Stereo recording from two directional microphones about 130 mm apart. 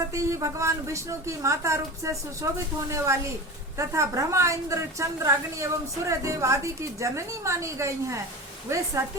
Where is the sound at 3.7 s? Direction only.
20° right (ahead or behind).